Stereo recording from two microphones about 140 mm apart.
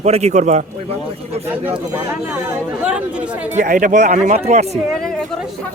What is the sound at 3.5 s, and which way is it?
Speech, 65° right (ahead or behind).